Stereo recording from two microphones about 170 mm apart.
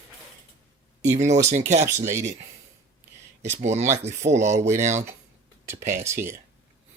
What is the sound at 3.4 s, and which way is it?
Speech, 40° right (ahead or behind).